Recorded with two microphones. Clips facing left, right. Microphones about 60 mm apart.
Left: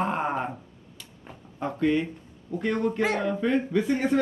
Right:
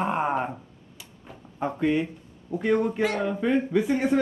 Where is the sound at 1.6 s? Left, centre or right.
Centre.